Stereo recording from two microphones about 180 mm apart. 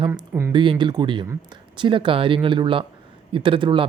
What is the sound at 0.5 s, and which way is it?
Speech, 25° right (ahead or behind).